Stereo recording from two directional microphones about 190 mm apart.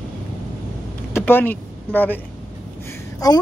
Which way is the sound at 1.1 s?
10° left (ahead or behind).